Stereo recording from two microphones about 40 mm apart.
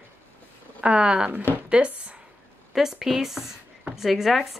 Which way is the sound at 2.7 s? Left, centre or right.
Centre.